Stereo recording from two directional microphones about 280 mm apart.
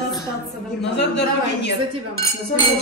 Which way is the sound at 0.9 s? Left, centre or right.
Left.